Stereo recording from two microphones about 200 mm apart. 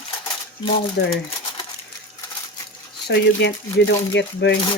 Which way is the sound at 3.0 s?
60° left (ahead or behind).